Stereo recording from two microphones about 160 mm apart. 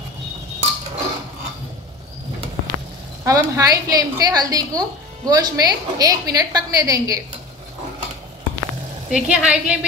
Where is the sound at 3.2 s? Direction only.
20° right (ahead or behind).